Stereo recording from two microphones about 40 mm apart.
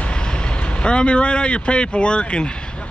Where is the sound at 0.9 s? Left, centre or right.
Left.